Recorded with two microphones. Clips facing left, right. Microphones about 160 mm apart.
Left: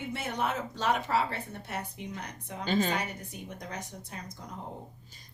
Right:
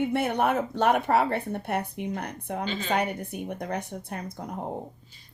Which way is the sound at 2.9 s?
60° right (ahead or behind).